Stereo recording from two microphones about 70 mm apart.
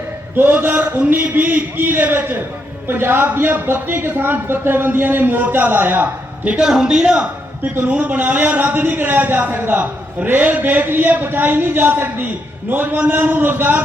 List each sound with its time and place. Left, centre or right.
0.3 s speech: right
7.6 s speech: right